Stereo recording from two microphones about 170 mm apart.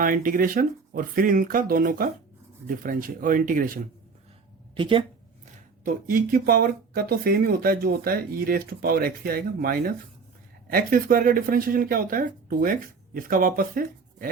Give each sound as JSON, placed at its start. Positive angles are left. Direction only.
{"t": 0.0, "sound": "speech", "side_deg": -55}
{"t": 4.7, "sound": "speech", "side_deg": -30}
{"t": 5.8, "sound": "speech", "side_deg": -55}